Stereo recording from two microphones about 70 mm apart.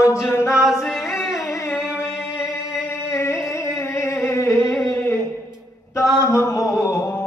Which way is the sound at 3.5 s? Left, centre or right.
Left.